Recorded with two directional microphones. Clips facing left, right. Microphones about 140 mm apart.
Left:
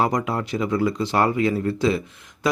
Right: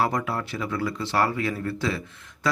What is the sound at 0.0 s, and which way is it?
Speech, 20° left (ahead or behind).